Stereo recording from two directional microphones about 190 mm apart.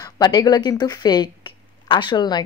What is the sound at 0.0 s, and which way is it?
Speech, 20° left (ahead or behind).